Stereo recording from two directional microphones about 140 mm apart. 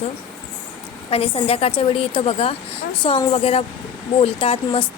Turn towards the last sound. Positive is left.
turn(degrees=40)  # may be behind; listen again after turning